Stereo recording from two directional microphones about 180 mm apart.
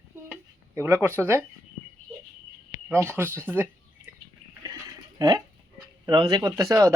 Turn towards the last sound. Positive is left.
turn(degrees=-15)  # may be behind; listen again after turning